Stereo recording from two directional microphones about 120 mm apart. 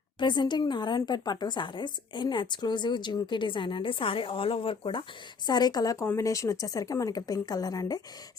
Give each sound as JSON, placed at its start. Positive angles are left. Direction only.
{"t": 0.2, "sound": "a woman's voice", "side_deg": 40}
{"t": 5.5, "sound": "a woman's voice", "side_deg": 35}